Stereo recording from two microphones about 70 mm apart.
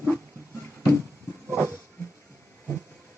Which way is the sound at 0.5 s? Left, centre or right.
Right.